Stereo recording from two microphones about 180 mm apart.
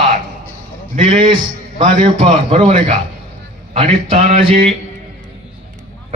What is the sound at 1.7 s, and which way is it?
Speech, 30° right (ahead or behind).